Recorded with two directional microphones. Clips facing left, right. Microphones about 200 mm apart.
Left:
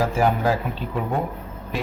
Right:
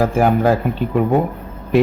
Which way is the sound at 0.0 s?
55° right (ahead or behind).